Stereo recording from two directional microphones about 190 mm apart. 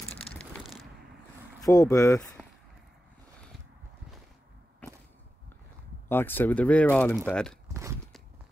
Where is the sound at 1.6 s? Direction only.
20° left (ahead or behind).